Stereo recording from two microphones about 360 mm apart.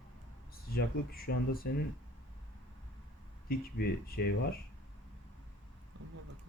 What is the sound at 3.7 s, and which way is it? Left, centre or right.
Speech, left.